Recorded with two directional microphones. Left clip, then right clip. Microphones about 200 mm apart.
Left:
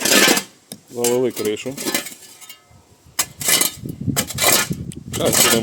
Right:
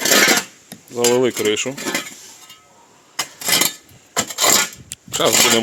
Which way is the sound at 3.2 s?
40° left (ahead or behind).